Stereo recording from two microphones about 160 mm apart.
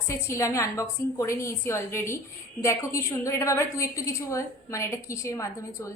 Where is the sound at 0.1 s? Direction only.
15° left (ahead or behind).